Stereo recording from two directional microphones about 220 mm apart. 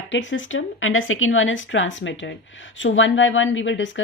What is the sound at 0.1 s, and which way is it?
Speech, 55° left (ahead or behind).